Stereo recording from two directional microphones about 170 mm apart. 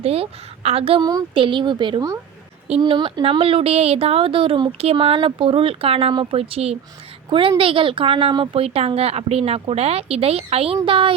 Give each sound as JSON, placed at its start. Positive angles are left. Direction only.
{"t": 0.0, "sound": "a woman's voice", "side_deg": -35}